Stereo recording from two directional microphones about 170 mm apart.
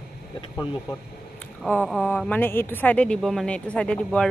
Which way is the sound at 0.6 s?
25° left (ahead or behind).